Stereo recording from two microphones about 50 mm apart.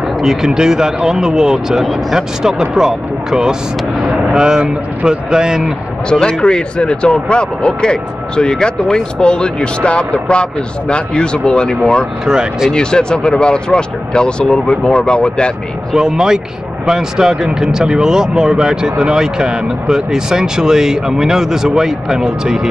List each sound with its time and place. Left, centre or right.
0.2 s speech: centre
6.0 s speech: centre
12.3 s speech: centre
12.7 s speech: centre
16.0 s speech: centre